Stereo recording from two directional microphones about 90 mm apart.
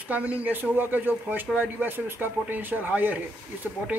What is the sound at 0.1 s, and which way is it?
Speech, 15° right (ahead or behind).